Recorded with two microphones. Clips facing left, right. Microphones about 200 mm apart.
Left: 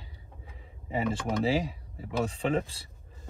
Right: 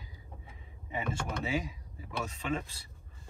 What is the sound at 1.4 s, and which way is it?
Speech, 30° left (ahead or behind).